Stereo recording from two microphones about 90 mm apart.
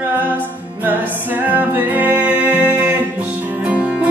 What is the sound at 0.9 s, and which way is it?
Music, 20° right (ahead or behind).